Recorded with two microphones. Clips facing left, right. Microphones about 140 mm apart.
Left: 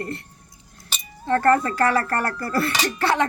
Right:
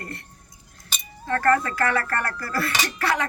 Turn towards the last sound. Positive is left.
turn(degrees=30)  # may be behind; listen again after turning